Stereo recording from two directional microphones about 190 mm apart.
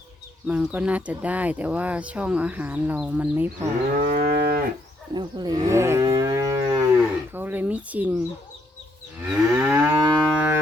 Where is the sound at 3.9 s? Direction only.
45° right (ahead or behind).